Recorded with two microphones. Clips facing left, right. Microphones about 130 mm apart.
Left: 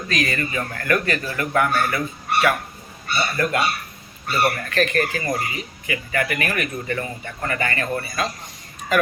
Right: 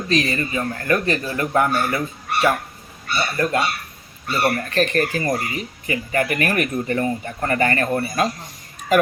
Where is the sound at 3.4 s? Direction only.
30° right (ahead or behind).